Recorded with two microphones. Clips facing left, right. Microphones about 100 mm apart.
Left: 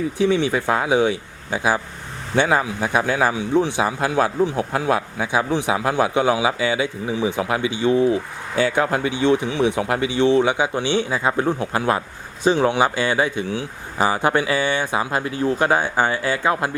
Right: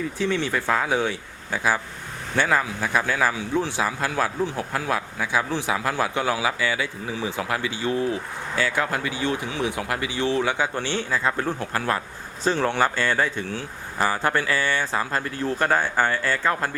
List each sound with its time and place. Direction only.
0.2 s a man's voice: 15° left (ahead or behind)